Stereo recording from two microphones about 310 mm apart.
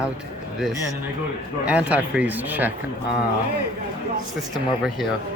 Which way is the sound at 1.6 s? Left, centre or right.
Centre.